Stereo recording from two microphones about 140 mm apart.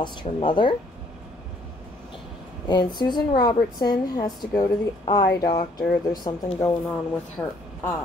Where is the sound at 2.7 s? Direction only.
30° left (ahead or behind).